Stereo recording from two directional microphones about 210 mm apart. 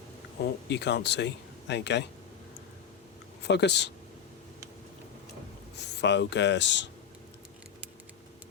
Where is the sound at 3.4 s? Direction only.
55° left (ahead or behind).